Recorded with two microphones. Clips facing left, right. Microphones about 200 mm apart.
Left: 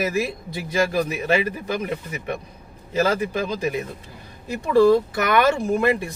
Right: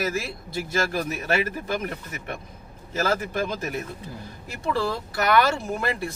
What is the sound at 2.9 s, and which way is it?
Speech, 15° left (ahead or behind).